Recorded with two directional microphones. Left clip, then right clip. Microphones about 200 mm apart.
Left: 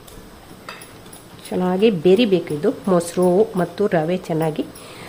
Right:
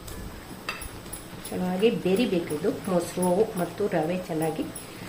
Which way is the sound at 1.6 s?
55° left (ahead or behind).